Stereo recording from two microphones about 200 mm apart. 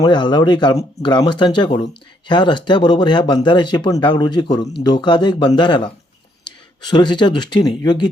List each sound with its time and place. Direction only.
0.0 s speech: 20° left (ahead or behind)